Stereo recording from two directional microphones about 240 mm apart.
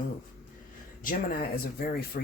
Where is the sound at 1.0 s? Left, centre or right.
Left.